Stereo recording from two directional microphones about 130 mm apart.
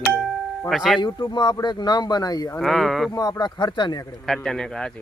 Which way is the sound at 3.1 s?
30° left (ahead or behind).